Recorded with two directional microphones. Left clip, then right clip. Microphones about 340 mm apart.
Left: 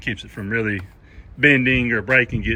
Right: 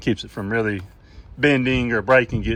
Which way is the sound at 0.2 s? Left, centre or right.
Centre.